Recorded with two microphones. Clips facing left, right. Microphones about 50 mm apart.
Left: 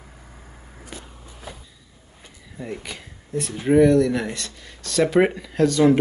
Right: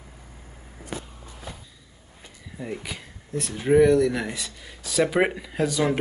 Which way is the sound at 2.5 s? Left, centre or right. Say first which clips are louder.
Left 1 dB; centre.